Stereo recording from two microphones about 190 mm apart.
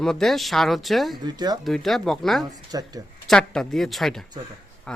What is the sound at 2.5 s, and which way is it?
Speech, 20° right (ahead or behind).